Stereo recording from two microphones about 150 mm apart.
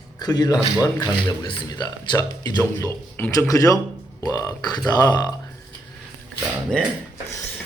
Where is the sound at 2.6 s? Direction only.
15° left (ahead or behind).